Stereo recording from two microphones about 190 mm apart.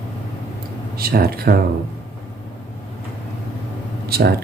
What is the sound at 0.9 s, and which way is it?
Speech, 55° right (ahead or behind).